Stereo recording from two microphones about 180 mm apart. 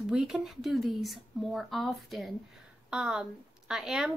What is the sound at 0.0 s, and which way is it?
A woman's voice, 5° right (ahead or behind).